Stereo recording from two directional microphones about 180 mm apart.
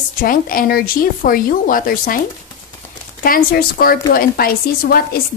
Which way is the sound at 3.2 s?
55° left (ahead or behind).